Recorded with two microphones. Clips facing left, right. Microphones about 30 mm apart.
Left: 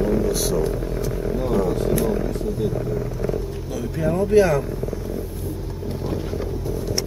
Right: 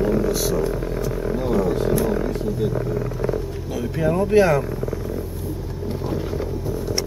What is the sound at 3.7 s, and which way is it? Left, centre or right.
Speech, centre.